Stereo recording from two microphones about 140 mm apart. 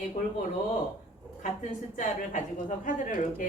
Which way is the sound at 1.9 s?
65° left (ahead or behind).